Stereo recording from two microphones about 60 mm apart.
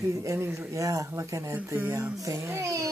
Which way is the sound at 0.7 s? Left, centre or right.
Right.